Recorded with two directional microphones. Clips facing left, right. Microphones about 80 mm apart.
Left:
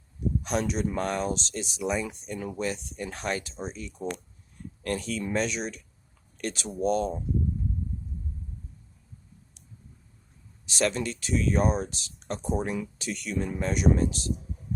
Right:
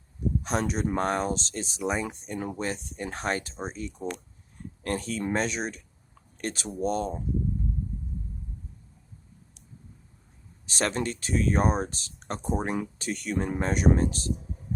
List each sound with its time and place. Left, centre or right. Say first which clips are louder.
0.4 s speech: even; right
10.7 s speech: left 1 dB; right